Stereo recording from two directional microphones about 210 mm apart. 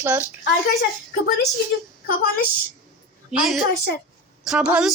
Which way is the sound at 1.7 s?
55° left (ahead or behind).